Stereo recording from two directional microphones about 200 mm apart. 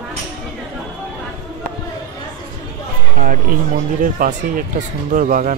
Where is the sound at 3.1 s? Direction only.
45° right (ahead or behind).